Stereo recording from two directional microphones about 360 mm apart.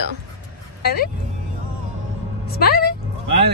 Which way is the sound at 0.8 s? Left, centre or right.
Left.